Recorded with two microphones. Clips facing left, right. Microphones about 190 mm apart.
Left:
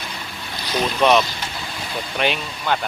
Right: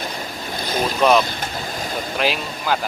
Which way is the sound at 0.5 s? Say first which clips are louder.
Right 1 dB; 50° right (ahead or behind).